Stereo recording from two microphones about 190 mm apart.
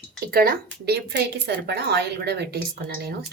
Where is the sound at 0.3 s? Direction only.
50° right (ahead or behind).